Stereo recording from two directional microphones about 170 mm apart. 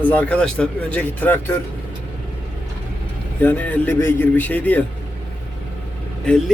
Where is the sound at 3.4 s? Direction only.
10° left (ahead or behind).